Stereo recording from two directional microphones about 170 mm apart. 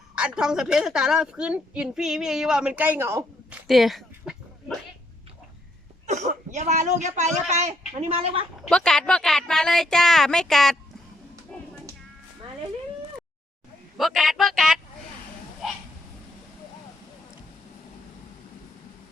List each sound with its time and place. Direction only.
0.2 s a woman's voice: 5° right (ahead or behind)
3.7 s speech: centre (ahead or behind)
6.1 s a man's voice: 45° right (ahead or behind)
8.7 s a woman's voice: 5° left (ahead or behind)
11.5 s a sound: 5° left (ahead or behind)
13.9 s a woman's voice: centre (ahead or behind)